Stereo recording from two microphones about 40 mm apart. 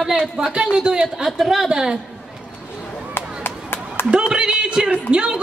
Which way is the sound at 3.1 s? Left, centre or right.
Left.